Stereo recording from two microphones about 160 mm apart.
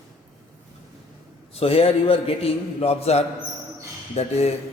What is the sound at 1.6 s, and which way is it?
A man's voice, 40° left (ahead or behind).